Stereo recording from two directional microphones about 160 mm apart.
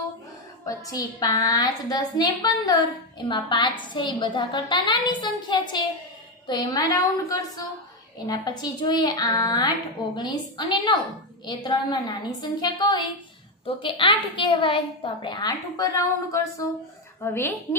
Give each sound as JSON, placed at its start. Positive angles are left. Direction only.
{"t": 0.8, "sound": "a woman's voice", "side_deg": 20}